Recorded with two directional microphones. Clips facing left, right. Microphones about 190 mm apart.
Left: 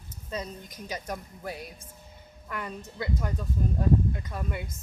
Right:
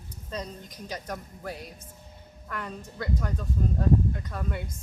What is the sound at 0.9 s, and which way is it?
A woman's voice, 10° left (ahead or behind).